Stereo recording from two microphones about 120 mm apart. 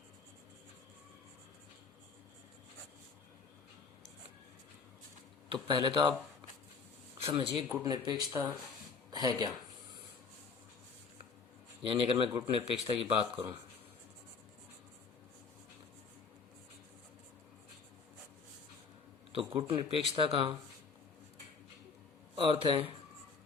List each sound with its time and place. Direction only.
5.5 s speech: 45° right (ahead or behind)
7.3 s speech: 45° right (ahead or behind)
9.0 s a sound: 35° right (ahead or behind)
12.1 s speech: 35° right (ahead or behind)
12.5 s speech: 50° right (ahead or behind)
19.4 s speech: 50° right (ahead or behind)
22.4 s speech: 50° right (ahead or behind)